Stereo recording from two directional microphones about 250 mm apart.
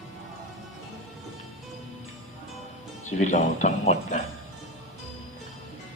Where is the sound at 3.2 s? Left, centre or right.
Left.